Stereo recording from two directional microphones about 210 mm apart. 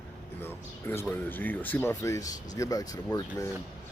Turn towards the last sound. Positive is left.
turn(degrees=15)  # may be behind; listen again after turning